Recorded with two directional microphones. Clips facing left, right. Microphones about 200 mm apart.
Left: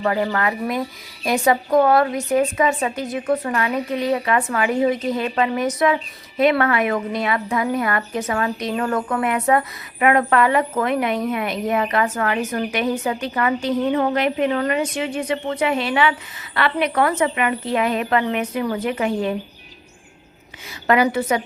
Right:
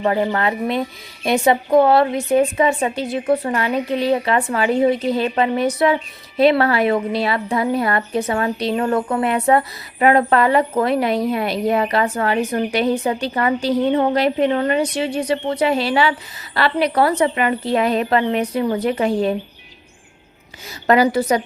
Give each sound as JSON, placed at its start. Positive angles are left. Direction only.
{"t": 0.0, "sound": "a woman's voice", "side_deg": -30}
{"t": 20.8, "sound": "a woman's voice", "side_deg": -35}